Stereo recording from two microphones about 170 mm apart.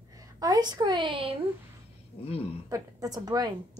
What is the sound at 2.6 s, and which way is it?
Speech, 20° right (ahead or behind).